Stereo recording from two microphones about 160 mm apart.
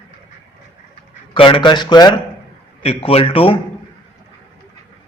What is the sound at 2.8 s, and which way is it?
Speech, 35° left (ahead or behind).